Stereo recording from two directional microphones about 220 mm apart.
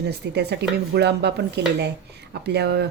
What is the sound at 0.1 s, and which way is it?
Speech, 50° right (ahead or behind).